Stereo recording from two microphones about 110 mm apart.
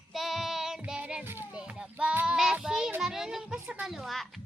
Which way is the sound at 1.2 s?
20° right (ahead or behind).